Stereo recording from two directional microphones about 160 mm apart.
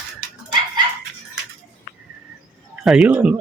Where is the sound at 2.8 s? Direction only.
5° right (ahead or behind).